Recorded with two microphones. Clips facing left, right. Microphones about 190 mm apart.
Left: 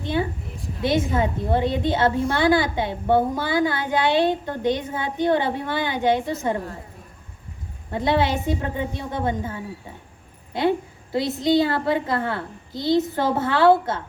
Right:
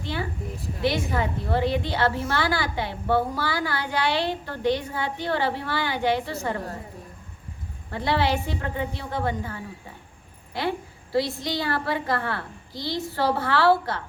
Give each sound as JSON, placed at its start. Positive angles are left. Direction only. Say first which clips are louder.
{"t": 0.0, "sound": "a sound", "louder": "left 6 dB", "side_deg": 20}
{"t": 0.8, "sound": "a woman's voice", "louder": "left 4 dB", "side_deg": 20}
{"t": 7.9, "sound": "a woman's voice", "louder": "left 3 dB", "side_deg": 20}